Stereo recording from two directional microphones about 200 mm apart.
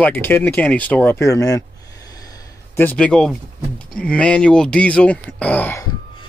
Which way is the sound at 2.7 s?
10° left (ahead or behind).